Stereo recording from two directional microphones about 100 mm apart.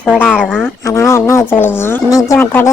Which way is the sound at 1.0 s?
30° left (ahead or behind).